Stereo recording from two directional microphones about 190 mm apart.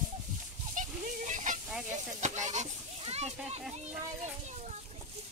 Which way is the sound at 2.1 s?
40° right (ahead or behind).